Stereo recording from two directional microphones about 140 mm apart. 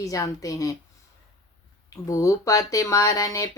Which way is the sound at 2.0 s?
25° left (ahead or behind).